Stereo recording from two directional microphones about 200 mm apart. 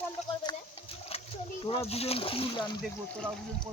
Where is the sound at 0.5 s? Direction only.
20° left (ahead or behind).